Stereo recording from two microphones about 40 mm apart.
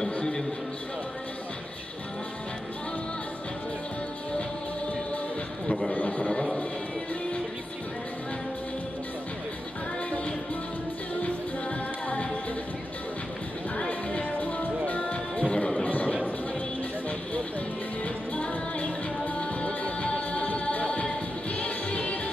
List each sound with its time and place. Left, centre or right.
5.7 s speech: left
6.3 s speech: left
13.7 s music: left
15.9 s a sound: left
18.0 s music: left